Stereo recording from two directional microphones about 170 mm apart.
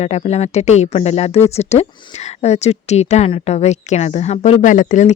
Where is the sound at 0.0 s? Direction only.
40° left (ahead or behind).